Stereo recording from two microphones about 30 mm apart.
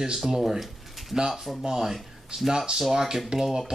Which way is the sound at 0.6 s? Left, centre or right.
Centre.